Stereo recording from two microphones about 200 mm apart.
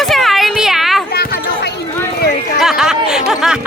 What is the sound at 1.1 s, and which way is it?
Basketball bounce, 50° left (ahead or behind).